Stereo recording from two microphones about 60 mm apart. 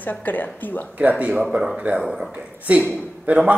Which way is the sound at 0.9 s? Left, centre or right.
Right.